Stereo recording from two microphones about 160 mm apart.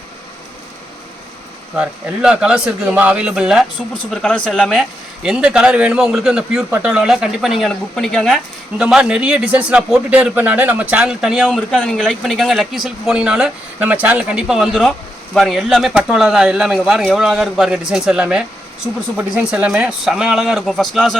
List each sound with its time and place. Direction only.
1.7 s a man's voice: 5° right (ahead or behind)